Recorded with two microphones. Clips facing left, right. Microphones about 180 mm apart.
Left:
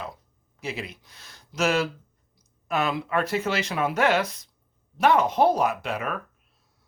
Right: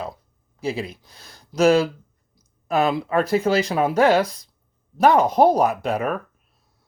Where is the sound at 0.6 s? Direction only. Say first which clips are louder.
Right 7 dB; 35° right (ahead or behind).